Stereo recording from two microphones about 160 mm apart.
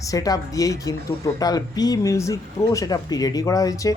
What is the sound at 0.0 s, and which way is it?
Speech, 20° left (ahead or behind).